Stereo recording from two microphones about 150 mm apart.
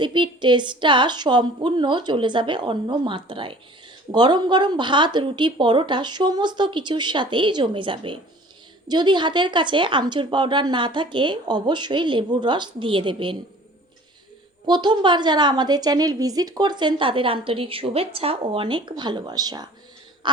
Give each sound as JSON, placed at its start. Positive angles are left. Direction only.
{"t": 0.0, "sound": "speech", "side_deg": -30}
{"t": 14.7, "sound": "a woman's voice", "side_deg": -30}
{"t": 20.2, "sound": "a sound", "side_deg": -30}